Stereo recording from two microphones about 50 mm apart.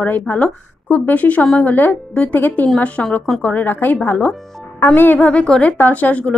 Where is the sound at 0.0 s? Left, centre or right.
Left.